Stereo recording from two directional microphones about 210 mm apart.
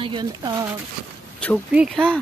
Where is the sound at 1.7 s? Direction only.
Centre (ahead or behind).